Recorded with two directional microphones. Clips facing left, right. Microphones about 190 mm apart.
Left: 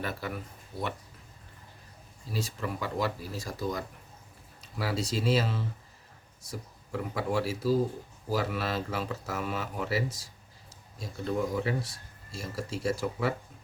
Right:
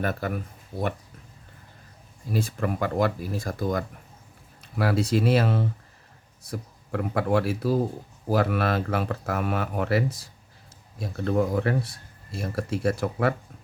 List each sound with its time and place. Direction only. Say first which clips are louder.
0.0 s speech: right 7 dB; 50° right (ahead or behind)
2.3 s speech: right 7 dB; 55° right (ahead or behind)